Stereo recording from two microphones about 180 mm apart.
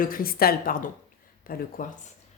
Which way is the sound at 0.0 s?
55° left (ahead or behind).